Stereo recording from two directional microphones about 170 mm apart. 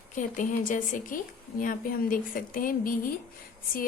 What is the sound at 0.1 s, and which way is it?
A woman's voice, 50° left (ahead or behind).